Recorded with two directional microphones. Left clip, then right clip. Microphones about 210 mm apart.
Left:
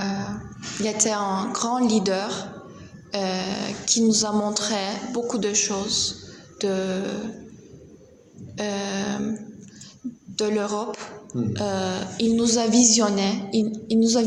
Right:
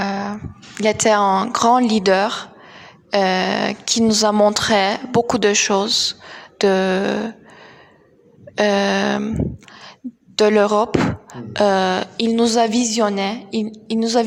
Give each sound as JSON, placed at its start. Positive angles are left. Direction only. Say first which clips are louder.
{"t": 0.0, "sound": "a sound", "louder": "right 7 dB", "side_deg": -45}
{"t": 0.8, "sound": "speech", "louder": "right 9 dB", "side_deg": -45}
{"t": 8.5, "sound": "speech", "louder": "right 12 dB", "side_deg": -45}
{"t": 10.3, "sound": "speech", "louder": "right 11 dB", "side_deg": -45}